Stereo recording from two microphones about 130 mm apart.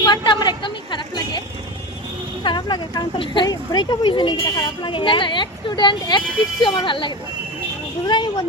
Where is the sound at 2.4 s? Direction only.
40° left (ahead or behind).